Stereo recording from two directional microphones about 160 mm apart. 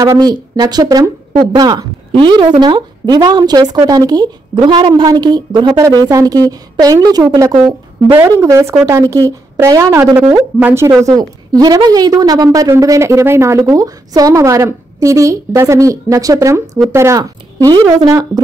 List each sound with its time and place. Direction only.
0.0 s a woman's voice: 20° right (ahead or behind)